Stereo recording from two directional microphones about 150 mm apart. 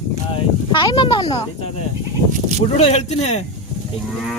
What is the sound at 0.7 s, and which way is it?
Speech, 30° left (ahead or behind).